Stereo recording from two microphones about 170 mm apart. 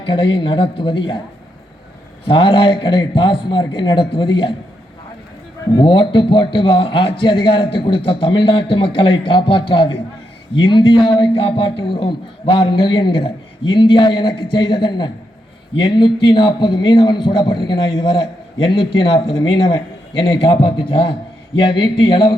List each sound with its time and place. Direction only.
0.0 s a man's voice: 30° left (ahead or behind)
2.2 s a man's voice: 30° left (ahead or behind)
5.7 s a man's voice: 30° left (ahead or behind)